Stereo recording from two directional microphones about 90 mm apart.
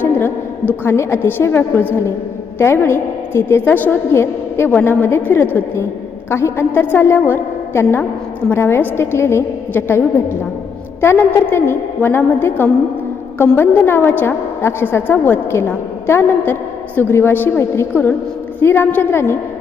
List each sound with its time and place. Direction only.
0.0 s a woman's voice: 20° left (ahead or behind)